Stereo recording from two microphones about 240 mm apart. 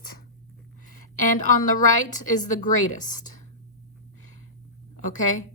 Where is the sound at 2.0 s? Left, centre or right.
Left.